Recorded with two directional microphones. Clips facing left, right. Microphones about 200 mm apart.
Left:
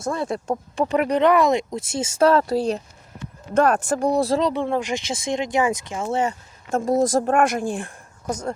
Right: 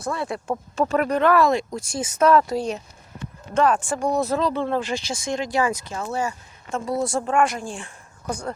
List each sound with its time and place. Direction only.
0.1 s speech: 45° left (ahead or behind)
0.4 s speech: 15° left (ahead or behind)
6.7 s a woman's voice: 45° left (ahead or behind)
7.3 s speech: 55° left (ahead or behind)
8.3 s speech: 20° left (ahead or behind)